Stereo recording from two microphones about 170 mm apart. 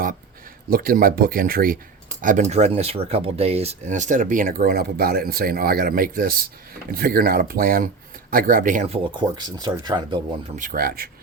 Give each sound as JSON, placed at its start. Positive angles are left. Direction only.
{"t": 0.7, "sound": "speech", "side_deg": -60}
{"t": 2.2, "sound": "speech", "side_deg": -45}
{"t": 9.1, "sound": "speech", "side_deg": -25}
{"t": 10.5, "sound": "speech", "side_deg": -55}